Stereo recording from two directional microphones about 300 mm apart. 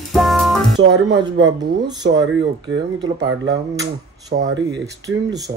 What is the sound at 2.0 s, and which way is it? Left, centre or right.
Speech, right.